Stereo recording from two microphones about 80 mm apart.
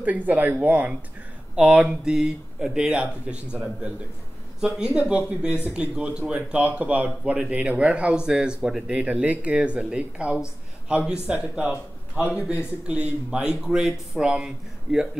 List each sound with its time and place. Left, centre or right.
0.0 s speech: centre
4.6 s speech: centre